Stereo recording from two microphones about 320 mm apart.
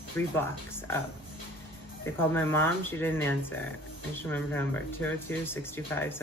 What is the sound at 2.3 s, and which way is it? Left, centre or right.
Speech, centre.